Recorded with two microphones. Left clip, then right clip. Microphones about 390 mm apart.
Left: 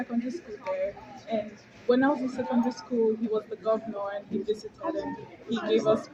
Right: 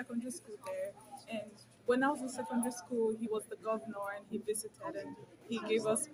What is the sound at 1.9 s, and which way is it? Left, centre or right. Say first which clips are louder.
Speech: left 8 dB; right.